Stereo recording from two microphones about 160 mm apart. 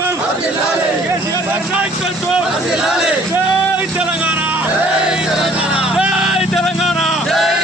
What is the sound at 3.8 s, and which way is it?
Speech, 10° right (ahead or behind).